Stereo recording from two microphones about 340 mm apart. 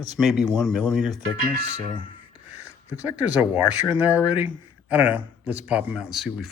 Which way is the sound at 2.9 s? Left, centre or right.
Centre.